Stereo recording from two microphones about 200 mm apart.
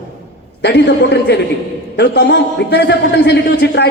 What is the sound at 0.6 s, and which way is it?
A man's voice, 60° left (ahead or behind).